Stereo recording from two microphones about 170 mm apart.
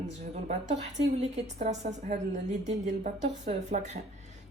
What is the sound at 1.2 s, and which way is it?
Speech, 40° right (ahead or behind).